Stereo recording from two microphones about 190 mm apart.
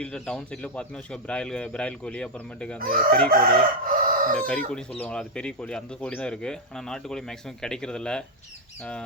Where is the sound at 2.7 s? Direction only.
50° right (ahead or behind).